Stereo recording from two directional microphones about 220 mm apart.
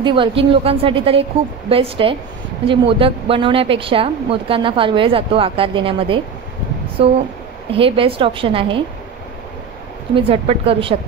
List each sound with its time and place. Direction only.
0.0 s a woman's voice: 20° right (ahead or behind)
10.1 s a woman's voice: 25° right (ahead or behind)